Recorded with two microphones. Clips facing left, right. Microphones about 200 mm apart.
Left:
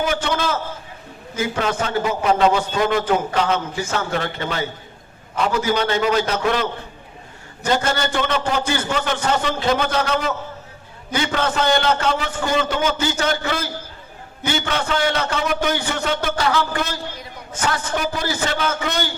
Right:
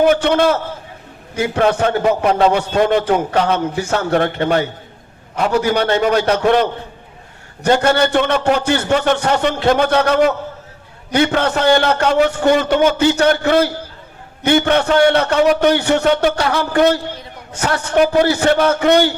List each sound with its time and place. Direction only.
0.0 s a man's voice: 60° right (ahead or behind)
7.6 s a man's voice: 60° right (ahead or behind)